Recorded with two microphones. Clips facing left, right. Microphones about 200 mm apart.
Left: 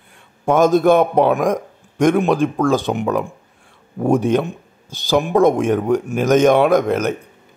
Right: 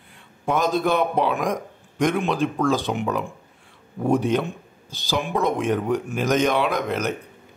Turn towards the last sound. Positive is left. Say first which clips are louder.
# left 8 dB
turn(degrees=50)  # may be behind; listen again after turning